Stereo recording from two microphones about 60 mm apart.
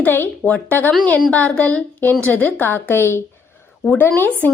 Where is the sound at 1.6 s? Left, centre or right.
Left.